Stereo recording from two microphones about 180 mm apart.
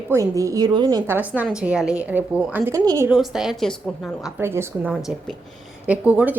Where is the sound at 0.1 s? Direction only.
15° right (ahead or behind).